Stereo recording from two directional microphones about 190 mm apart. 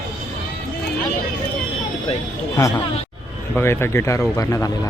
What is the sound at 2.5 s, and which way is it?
Speech, 20° left (ahead or behind).